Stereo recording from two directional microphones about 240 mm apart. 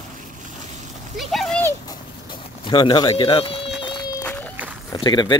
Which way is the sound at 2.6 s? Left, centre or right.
Centre.